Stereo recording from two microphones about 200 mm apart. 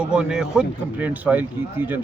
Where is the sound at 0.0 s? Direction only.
5° right (ahead or behind).